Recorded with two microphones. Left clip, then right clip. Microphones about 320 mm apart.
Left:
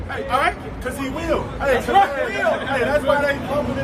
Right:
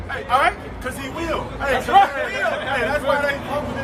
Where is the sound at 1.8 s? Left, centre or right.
Centre.